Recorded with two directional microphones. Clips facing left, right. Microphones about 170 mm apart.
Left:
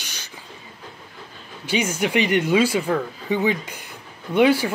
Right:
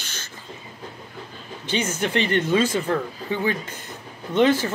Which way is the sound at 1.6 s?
10° left (ahead or behind).